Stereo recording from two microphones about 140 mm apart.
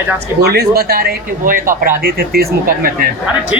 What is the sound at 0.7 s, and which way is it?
Speech, 90° right.